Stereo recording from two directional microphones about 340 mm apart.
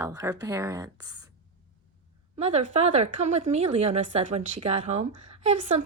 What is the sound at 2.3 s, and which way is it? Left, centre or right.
Speech, centre.